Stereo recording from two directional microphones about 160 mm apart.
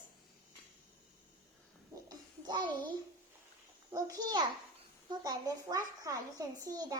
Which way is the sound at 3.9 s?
25° right (ahead or behind).